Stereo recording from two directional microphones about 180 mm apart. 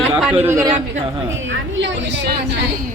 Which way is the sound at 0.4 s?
15° right (ahead or behind).